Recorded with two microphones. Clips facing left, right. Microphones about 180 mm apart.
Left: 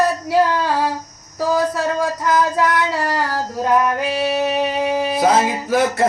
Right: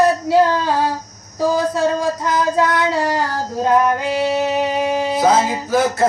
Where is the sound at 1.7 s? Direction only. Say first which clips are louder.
Right 2 dB; 25° right (ahead or behind).